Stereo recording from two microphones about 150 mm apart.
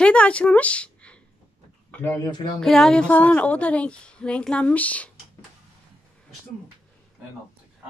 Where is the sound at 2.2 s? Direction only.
25° left (ahead or behind).